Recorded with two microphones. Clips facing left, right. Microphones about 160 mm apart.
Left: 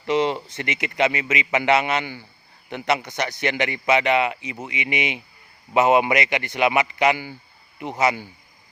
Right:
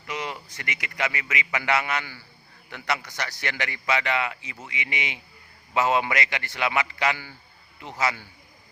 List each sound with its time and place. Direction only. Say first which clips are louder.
0.0 s a man's voice: left 12 dB; 25° left (ahead or behind)